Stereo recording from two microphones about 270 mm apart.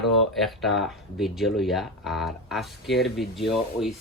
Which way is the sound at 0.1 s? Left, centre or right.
Centre.